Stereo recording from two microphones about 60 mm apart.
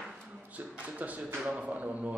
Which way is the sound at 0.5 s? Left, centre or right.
Right.